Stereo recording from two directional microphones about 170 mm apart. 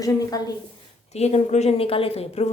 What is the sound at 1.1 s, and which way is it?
A woman's voice, 40° left (ahead or behind).